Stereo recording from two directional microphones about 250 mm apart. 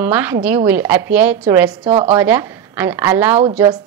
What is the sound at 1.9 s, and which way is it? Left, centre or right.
Speech, right.